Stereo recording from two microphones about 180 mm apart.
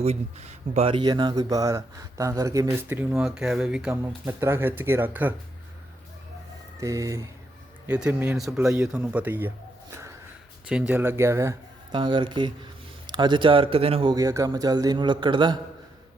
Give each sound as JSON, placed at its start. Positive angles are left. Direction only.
{"t": 0.0, "sound": "speech", "side_deg": -35}
{"t": 6.7, "sound": "speech", "side_deg": -15}
{"t": 7.9, "sound": "speech", "side_deg": -5}
{"t": 10.7, "sound": "speech", "side_deg": -5}